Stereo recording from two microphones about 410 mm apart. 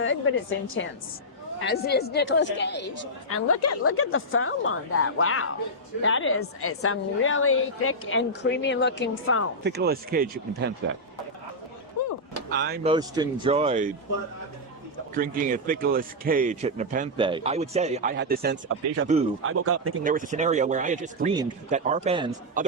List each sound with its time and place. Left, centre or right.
0.0 s a woman's voice: left
9.6 s a man's voice: right
12.0 s a sound: left
12.5 s a man's voice: right
12.9 s speech: centre
15.1 s a man's voice: centre
20.1 s speech: centre